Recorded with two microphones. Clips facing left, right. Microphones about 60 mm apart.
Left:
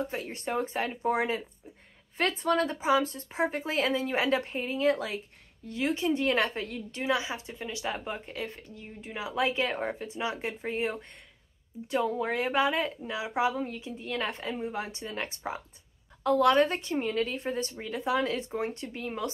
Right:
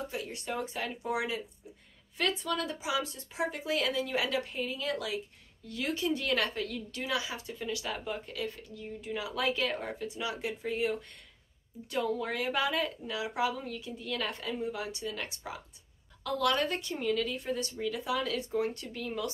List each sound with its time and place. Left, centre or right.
0.0 s a woman's voice: left